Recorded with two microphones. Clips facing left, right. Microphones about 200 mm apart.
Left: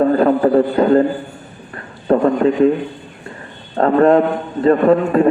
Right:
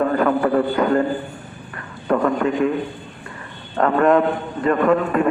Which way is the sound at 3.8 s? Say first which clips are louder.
Left 4 dB; 30° left (ahead or behind).